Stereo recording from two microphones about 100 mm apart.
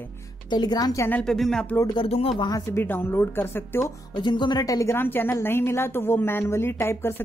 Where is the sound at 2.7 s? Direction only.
20° left (ahead or behind).